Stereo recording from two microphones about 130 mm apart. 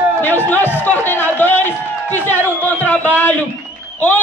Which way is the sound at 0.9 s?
15° left (ahead or behind).